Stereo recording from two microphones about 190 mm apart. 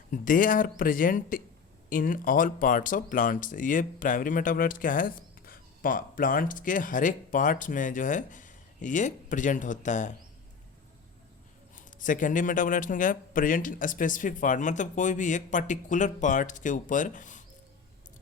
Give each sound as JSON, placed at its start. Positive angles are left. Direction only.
{"t": 0.1, "sound": "speech", "side_deg": 45}
{"t": 11.7, "sound": "speech", "side_deg": 45}